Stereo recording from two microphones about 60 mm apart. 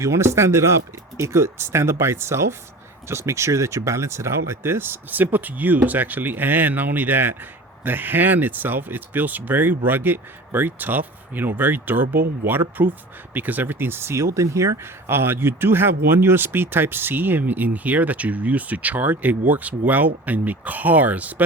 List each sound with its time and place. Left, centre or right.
0.0 s speech: right
15.1 s speech: right